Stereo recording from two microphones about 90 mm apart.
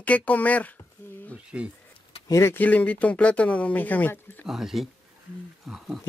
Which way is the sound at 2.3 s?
30° left (ahead or behind).